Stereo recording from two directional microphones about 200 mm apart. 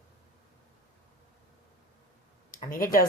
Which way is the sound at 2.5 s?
45° left (ahead or behind).